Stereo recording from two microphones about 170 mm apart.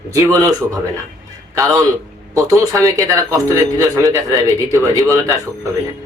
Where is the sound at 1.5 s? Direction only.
20° right (ahead or behind).